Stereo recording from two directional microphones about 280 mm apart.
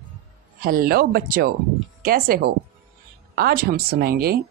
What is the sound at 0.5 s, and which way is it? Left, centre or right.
Speech, right.